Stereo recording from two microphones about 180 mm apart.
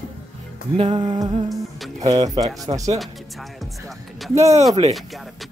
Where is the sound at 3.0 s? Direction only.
Centre (ahead or behind).